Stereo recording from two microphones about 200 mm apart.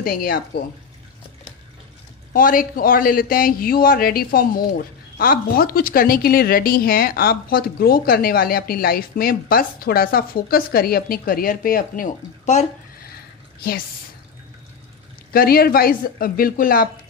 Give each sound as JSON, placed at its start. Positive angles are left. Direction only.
{"t": 0.0, "sound": "a man's voice", "side_deg": 45}
{"t": 2.3, "sound": "a man's voice", "side_deg": 45}
{"t": 15.3, "sound": "a man's voice", "side_deg": 50}